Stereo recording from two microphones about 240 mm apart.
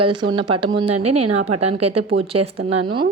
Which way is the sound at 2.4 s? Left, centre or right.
Right.